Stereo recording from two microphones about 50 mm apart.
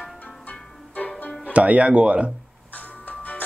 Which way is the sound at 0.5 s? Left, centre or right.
Left.